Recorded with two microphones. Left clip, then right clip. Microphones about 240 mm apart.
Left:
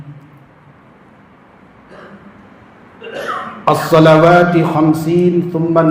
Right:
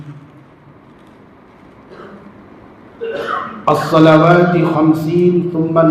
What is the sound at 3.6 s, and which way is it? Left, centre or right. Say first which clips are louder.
A man's voice: left 1 dB; left.